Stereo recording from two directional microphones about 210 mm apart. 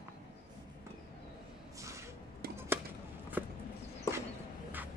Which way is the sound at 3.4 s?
10° right (ahead or behind).